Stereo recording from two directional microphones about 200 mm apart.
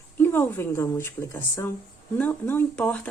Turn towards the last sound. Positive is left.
turn(degrees=5)  # may be behind; listen again after turning